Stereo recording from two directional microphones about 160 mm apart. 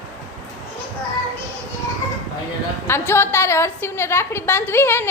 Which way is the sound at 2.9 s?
15° left (ahead or behind).